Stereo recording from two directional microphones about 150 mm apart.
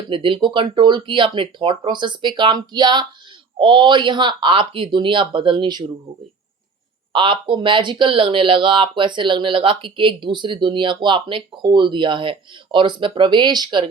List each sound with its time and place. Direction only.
0.1 s speech: 35° right (ahead or behind)
7.1 s speech: 35° right (ahead or behind)